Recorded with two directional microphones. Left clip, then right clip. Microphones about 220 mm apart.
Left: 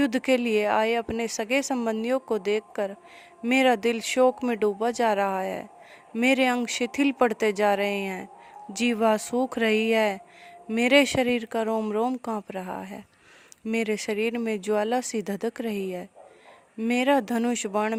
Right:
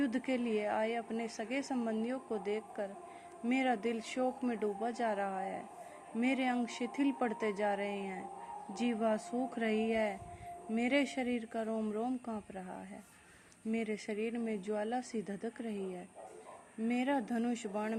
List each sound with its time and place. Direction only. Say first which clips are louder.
0.0 s speech: left 12 dB; 55° left (ahead or behind)